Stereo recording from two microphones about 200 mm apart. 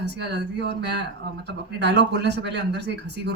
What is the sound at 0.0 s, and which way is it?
Speech, 60° right (ahead or behind).